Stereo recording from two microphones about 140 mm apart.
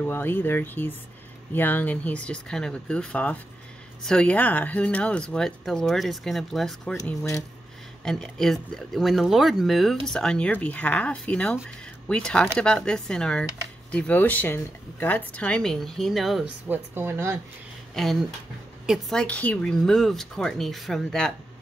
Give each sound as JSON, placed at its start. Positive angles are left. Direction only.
{"t": 0.0, "sound": "speech", "side_deg": 15}
{"t": 8.0, "sound": "speech", "side_deg": 5}
{"t": 16.6, "sound": "speech", "side_deg": -15}
{"t": 18.0, "sound": "speech", "side_deg": 0}